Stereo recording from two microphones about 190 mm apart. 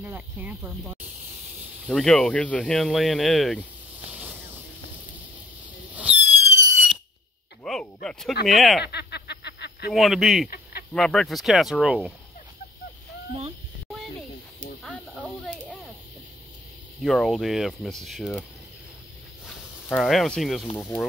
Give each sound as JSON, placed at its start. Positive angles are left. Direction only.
{"t": 0.0, "sound": "speech", "side_deg": -10}
{"t": 1.9, "sound": "speech", "side_deg": 5}
{"t": 4.1, "sound": "snake", "side_deg": -10}
{"t": 5.9, "sound": "fireworks", "side_deg": -10}
{"t": 7.6, "sound": "a sound", "side_deg": 0}
{"t": 8.5, "sound": "speech", "side_deg": 0}
{"t": 8.8, "sound": "a sound", "side_deg": 60}
{"t": 9.8, "sound": "speech", "side_deg": 0}
{"t": 17.0, "sound": "speech", "side_deg": 0}
{"t": 19.4, "sound": "a sound", "side_deg": 0}